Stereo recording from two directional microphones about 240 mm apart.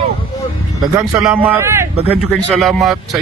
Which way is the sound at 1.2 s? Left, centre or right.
Centre.